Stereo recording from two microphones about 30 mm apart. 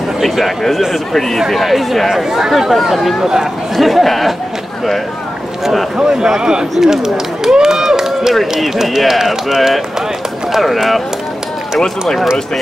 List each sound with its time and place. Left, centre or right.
0.7 s speech: centre
2.0 s speech: centre
5.9 s a man's voice: right
8.8 s speech: centre